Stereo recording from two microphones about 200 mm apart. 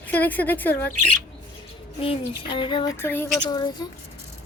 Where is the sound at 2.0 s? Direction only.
25° left (ahead or behind).